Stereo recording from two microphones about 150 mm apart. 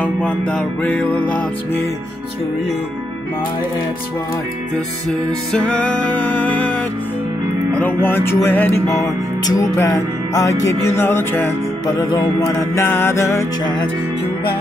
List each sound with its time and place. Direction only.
0.0 s music: 10° left (ahead or behind)
5.5 s music: 10° left (ahead or behind)
7.8 s music: 15° left (ahead or behind)